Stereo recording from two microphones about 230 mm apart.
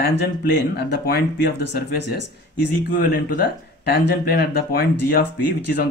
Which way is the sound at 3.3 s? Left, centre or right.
Left.